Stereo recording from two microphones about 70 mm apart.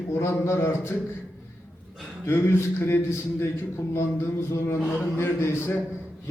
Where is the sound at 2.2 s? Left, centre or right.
Left.